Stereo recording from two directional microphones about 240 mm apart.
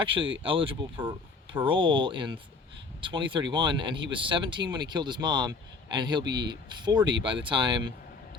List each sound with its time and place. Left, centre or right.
0.0 s speech: right